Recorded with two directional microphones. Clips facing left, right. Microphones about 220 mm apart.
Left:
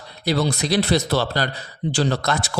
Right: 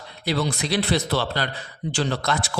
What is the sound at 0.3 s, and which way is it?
A man's voice, 40° left (ahead or behind).